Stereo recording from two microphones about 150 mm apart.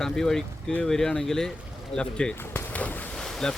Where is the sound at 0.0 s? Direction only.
5° left (ahead or behind).